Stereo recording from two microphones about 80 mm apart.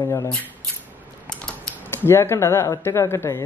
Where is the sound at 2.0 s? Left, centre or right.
Left.